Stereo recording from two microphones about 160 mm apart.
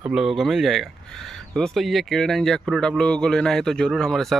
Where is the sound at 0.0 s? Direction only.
5° right (ahead or behind).